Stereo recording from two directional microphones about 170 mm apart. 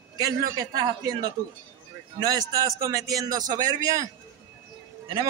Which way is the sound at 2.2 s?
20° right (ahead or behind).